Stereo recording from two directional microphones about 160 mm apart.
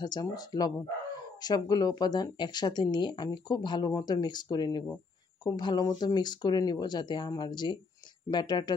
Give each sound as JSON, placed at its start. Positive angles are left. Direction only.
{"t": 0.0, "sound": "speech", "side_deg": 25}